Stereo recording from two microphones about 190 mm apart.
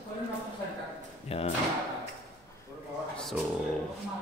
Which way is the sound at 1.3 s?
30° left (ahead or behind).